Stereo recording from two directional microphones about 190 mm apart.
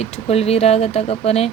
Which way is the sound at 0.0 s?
30° left (ahead or behind).